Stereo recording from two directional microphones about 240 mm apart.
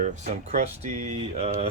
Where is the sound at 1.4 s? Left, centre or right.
Right.